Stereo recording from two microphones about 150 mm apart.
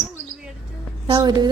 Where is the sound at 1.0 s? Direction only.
30° right (ahead or behind).